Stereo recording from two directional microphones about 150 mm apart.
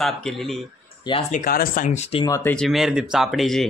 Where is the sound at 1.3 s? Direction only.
70° left (ahead or behind); by 2.3 s 45° left (ahead or behind).